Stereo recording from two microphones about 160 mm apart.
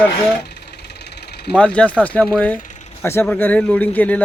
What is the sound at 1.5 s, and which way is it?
Speech, 5° left (ahead or behind).